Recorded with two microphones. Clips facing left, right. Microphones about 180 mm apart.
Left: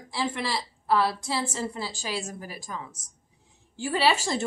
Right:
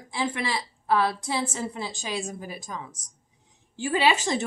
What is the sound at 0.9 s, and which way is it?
A woman's voice, 20° right (ahead or behind).